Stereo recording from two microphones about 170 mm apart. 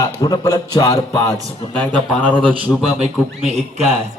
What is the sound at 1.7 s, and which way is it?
Speech, 10° left (ahead or behind).